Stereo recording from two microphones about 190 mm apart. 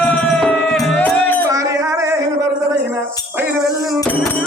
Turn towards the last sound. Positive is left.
turn(degrees=-15)  # may be behind; listen again after turning